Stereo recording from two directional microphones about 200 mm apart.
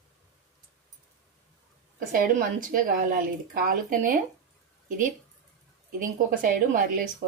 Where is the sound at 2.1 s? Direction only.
45° right (ahead or behind).